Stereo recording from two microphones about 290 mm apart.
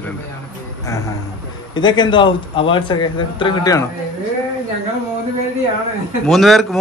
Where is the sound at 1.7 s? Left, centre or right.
Centre.